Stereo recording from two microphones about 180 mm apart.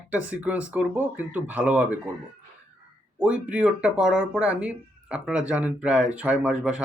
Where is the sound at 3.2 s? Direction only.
5° right (ahead or behind).